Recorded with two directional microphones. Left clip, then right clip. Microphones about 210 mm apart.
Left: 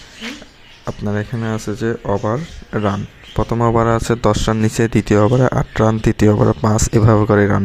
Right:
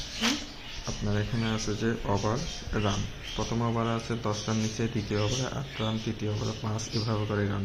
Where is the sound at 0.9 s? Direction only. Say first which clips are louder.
Left 11 dB; 45° left (ahead or behind).